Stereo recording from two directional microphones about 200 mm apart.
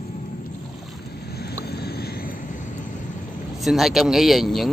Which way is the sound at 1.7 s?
55° left (ahead or behind).